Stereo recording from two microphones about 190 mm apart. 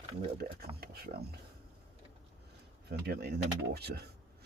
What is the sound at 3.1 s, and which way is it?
Speech, 60° right (ahead or behind).